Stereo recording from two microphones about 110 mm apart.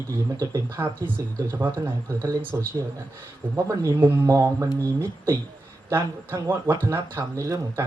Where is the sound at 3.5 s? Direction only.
30° right (ahead or behind).